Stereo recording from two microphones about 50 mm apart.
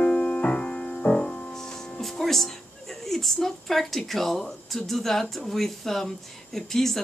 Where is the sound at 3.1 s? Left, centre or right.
Centre.